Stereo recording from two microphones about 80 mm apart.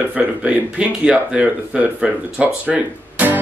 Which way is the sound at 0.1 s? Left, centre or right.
Centre.